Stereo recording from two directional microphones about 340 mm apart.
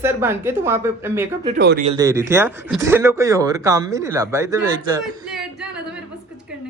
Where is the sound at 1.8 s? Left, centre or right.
Centre.